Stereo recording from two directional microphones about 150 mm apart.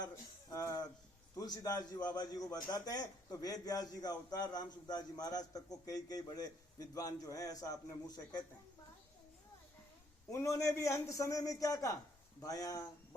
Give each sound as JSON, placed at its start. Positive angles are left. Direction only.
{"t": 0.5, "sound": "a man's voice", "side_deg": 20}
{"t": 10.3, "sound": "a man's voice", "side_deg": 20}